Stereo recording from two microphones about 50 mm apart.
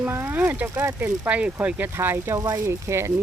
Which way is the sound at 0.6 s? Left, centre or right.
Right.